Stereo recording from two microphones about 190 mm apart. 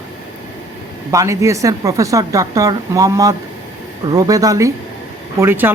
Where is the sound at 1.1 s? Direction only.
15° right (ahead or behind).